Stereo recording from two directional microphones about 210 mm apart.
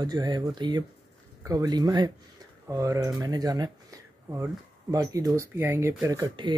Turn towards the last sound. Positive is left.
turn(degrees=-20)  # may be behind; listen again after turning